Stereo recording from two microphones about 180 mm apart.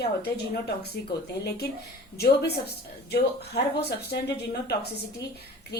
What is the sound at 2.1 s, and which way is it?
A woman's voice, 60° left (ahead or behind).